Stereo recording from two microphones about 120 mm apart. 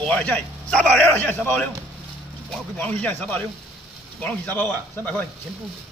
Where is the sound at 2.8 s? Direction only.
10° left (ahead or behind).